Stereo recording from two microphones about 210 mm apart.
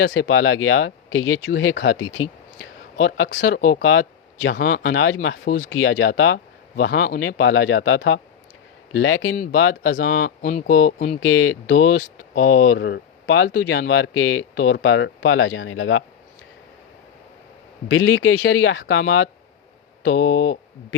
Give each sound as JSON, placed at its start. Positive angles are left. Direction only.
{"t": 0.0, "sound": "speech", "side_deg": 65}
{"t": 4.6, "sound": "speech", "side_deg": 45}
{"t": 5.8, "sound": "speech", "side_deg": 65}
{"t": 6.7, "sound": "speech", "side_deg": 50}
{"t": 7.3, "sound": "speech", "side_deg": 65}
{"t": 10.1, "sound": "speech", "side_deg": 40}
{"t": 11.2, "sound": "speech", "side_deg": 75}
{"t": 12.3, "sound": "speech", "side_deg": 40}
{"t": 12.7, "sound": "speech", "side_deg": 55}
{"t": 13.9, "sound": "speech", "side_deg": 70}
{"t": 17.8, "sound": "speech", "side_deg": 65}
{"t": 20.1, "sound": "speech", "side_deg": 55}